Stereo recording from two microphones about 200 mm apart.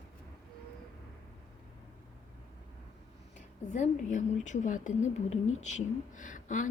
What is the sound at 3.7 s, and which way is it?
Speech, 35° left (ahead or behind).